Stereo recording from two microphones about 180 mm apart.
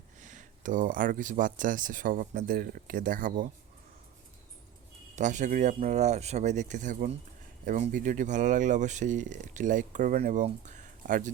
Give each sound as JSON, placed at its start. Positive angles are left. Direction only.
{"t": 0.2, "sound": "speech", "side_deg": -45}
{"t": 5.1, "sound": "speech", "side_deg": -40}
{"t": 10.4, "sound": "speech", "side_deg": -40}